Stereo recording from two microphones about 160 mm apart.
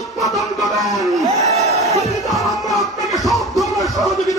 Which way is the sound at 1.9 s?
20° left (ahead or behind).